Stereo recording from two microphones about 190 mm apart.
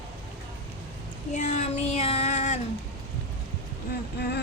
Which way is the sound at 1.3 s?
40° left (ahead or behind).